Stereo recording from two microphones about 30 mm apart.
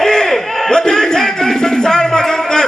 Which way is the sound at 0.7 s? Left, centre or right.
Centre.